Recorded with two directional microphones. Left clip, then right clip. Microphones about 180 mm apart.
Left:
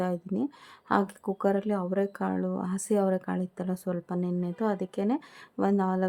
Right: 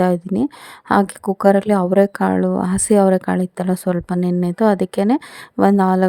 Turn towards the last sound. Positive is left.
turn(degrees=-50)  # may be behind; listen again after turning